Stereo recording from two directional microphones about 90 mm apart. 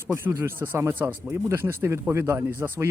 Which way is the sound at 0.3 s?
25° right (ahead or behind).